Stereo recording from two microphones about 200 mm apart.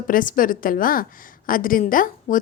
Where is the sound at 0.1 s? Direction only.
45° left (ahead or behind).